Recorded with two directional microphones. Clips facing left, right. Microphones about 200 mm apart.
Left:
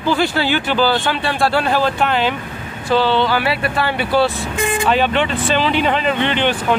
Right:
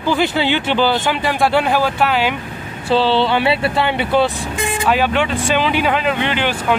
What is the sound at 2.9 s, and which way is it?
Speech, 30° right (ahead or behind).